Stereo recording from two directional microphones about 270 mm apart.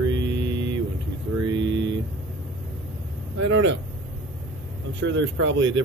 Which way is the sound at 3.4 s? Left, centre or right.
Right.